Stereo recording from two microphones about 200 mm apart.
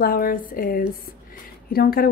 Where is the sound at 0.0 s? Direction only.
45° left (ahead or behind).